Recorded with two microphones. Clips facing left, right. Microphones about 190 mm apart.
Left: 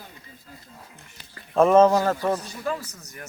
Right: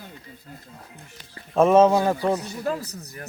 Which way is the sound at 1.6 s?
5° right (ahead or behind).